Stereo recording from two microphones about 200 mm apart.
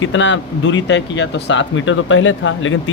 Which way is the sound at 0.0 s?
70° left (ahead or behind).